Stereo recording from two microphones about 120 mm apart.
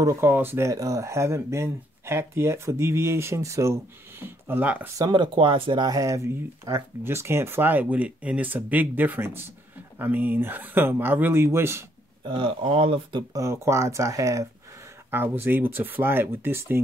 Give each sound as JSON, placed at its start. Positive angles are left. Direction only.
{"t": 0.0, "sound": "speech", "side_deg": -25}
{"t": 4.9, "sound": "speech", "side_deg": -35}
{"t": 12.3, "sound": "speech", "side_deg": -45}
{"t": 13.3, "sound": "speech", "side_deg": -25}